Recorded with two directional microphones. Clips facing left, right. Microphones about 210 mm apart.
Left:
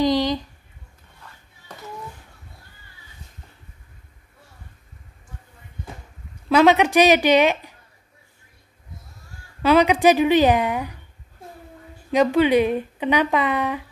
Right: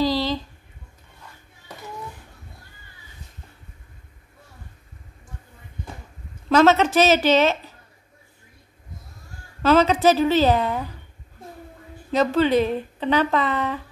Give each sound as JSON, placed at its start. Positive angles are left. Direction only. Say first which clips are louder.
{"t": 0.0, "sound": "a sound", "louder": "left 2 dB", "side_deg": 15}
{"t": 6.5, "sound": "speech", "louder": "left 1 dB", "side_deg": 15}
{"t": 9.6, "sound": "speech", "louder": "left 1 dB", "side_deg": 10}
{"t": 12.1, "sound": "speech", "louder": "left 2 dB", "side_deg": 15}